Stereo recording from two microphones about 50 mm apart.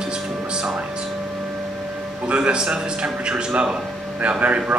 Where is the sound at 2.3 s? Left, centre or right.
Right.